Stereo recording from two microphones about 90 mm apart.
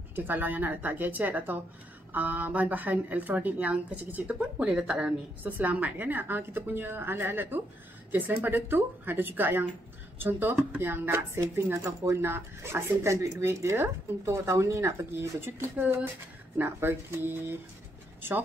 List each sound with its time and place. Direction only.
0.1 s a woman's voice: 20° right (ahead or behind)